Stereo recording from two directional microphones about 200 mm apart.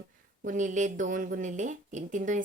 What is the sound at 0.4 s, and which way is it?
Speech, 40° right (ahead or behind).